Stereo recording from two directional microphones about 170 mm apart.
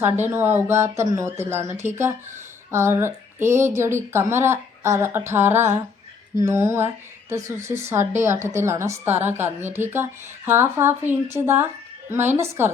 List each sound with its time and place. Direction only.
0.0 s a woman's voice: 15° right (ahead or behind)